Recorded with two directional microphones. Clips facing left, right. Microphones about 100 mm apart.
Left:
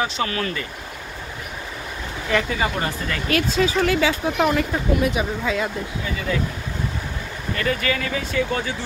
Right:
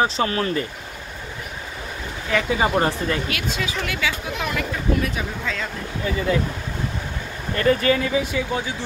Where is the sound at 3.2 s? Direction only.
35° left (ahead or behind).